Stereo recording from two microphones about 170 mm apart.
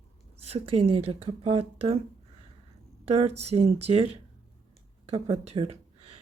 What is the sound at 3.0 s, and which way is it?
A woman's voice, 40° right (ahead or behind).